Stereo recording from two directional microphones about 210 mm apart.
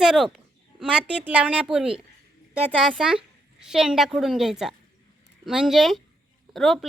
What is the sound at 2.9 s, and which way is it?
A woman's voice, 5° right (ahead or behind).